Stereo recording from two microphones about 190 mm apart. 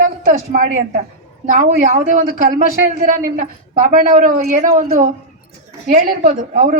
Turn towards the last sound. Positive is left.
turn(degrees=-45)  # may be behind; listen again after turning